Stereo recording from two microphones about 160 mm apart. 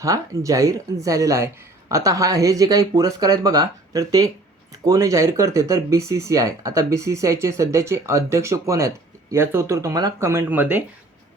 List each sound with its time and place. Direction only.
0.0 s speech: 20° right (ahead or behind)